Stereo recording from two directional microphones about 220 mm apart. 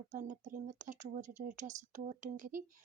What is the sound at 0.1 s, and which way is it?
A woman's voice, 35° right (ahead or behind).